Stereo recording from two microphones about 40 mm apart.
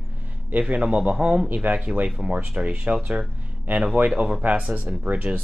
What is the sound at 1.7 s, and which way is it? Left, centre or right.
Speech, right.